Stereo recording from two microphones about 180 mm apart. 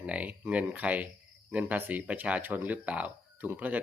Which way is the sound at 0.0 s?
5° right (ahead or behind).